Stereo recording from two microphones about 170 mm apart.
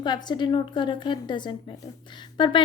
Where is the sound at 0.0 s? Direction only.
25° left (ahead or behind).